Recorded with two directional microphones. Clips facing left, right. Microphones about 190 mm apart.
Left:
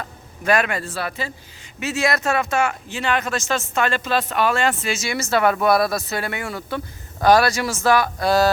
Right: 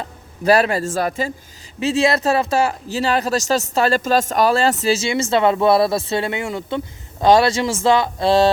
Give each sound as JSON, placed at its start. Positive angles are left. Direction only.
{"t": 0.0, "sound": "speech", "side_deg": -35}
{"t": 1.8, "sound": "speech", "side_deg": -30}